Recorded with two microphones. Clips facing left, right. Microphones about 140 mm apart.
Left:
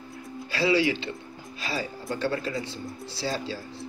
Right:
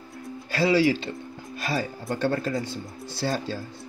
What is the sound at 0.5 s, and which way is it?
Speech, 45° right (ahead or behind).